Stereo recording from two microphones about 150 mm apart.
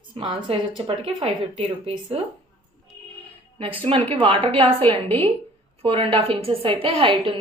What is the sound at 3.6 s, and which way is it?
A woman's voice, 35° right (ahead or behind).